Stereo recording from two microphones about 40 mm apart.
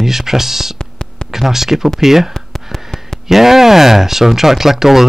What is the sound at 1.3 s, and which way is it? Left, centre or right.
Speech, centre.